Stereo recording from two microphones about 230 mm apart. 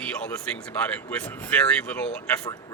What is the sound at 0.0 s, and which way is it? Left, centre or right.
Speech, centre.